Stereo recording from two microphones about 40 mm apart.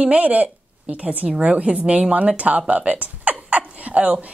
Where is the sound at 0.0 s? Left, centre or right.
Right.